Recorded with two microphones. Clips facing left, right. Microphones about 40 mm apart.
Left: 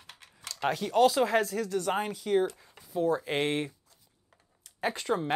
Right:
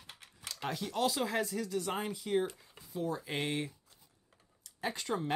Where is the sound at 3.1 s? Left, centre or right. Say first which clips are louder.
Left 8 dB; left.